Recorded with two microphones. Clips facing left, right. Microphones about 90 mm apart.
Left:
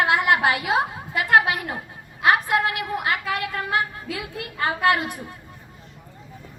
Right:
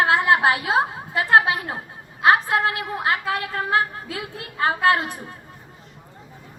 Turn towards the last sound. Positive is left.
turn(degrees=-30)  # may be behind; listen again after turning